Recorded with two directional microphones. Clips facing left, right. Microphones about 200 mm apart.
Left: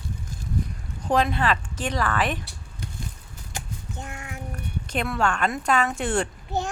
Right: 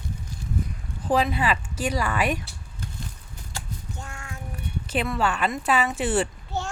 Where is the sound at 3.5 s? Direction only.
20° left (ahead or behind).